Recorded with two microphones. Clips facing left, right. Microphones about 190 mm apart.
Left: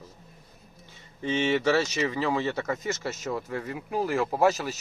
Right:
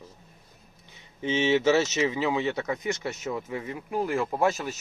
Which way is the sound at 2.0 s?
5° right (ahead or behind).